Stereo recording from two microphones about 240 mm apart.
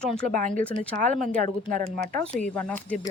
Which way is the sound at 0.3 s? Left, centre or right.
Right.